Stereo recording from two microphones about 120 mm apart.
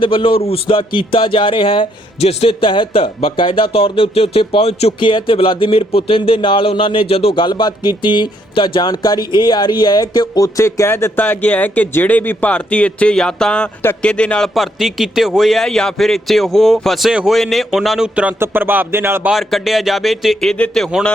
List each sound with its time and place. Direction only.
0.0 s a man's voice: 45° left (ahead or behind); by 19.3 s 20° right (ahead or behind)
19.3 s a man's voice: centre (ahead or behind)